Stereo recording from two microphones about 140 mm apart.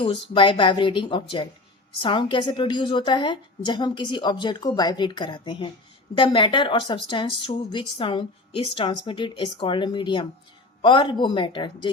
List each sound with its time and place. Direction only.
0.0 s speech: 40° left (ahead or behind)